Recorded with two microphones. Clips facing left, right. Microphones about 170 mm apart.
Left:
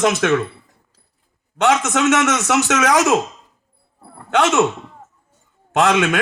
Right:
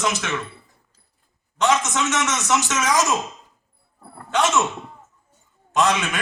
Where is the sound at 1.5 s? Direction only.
60° left (ahead or behind).